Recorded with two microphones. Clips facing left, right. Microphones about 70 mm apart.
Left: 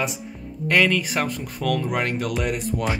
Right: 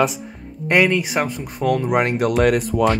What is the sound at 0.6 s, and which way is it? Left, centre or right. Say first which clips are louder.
Speech: right 3 dB; right.